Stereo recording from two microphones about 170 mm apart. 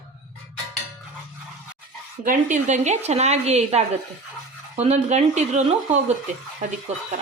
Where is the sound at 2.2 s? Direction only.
50° right (ahead or behind).